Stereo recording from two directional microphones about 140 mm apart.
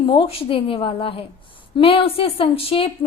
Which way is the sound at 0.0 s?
40° left (ahead or behind).